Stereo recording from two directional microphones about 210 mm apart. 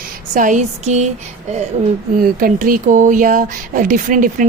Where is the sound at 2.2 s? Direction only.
40° right (ahead or behind).